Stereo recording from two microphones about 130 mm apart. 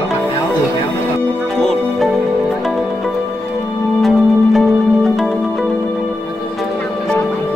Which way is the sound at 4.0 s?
Centre (ahead or behind).